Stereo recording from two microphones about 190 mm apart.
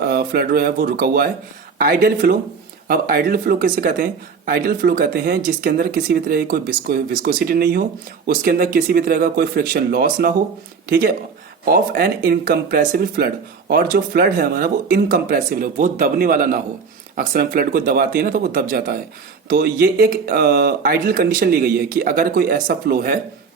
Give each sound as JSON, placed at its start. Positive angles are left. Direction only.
{"t": 0.0, "sound": "speech", "side_deg": -55}